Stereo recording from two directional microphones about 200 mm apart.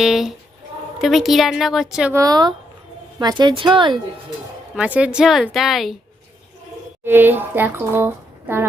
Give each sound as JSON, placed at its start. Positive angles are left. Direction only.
{"t": 0.0, "sound": "a woman's voice", "side_deg": 0}
{"t": 2.1, "sound": "a woman's voice", "side_deg": -20}
{"t": 4.7, "sound": "a woman's voice", "side_deg": -5}
{"t": 7.0, "sound": "speech", "side_deg": -10}